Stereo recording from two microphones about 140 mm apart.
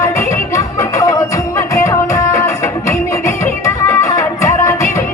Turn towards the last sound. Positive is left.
turn(degrees=25)  # may be behind; listen again after turning